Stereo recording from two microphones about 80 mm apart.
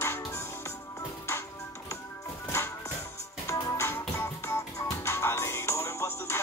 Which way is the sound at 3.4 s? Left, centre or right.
Left.